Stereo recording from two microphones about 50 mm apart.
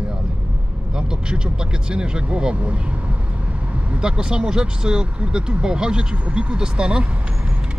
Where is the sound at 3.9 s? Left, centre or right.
Centre.